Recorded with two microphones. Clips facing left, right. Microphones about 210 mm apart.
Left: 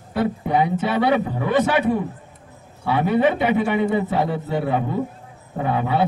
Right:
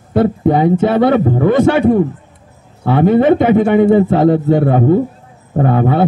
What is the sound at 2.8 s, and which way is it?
A man's voice, 50° right (ahead or behind).